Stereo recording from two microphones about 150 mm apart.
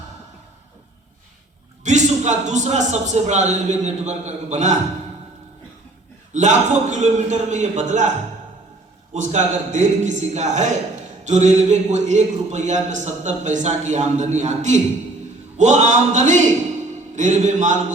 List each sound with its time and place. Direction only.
1.8 s a man's voice: 50° right (ahead or behind)
6.3 s a man's voice: 55° right (ahead or behind)
9.1 s a man's voice: 55° right (ahead or behind)